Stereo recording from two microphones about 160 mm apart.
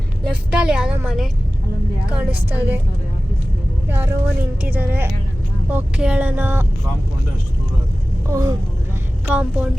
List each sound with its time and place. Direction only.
0.5 s a woman's voice: 5° right (ahead or behind)
3.8 s speech: 15° right (ahead or behind)
8.3 s speech: 15° right (ahead or behind)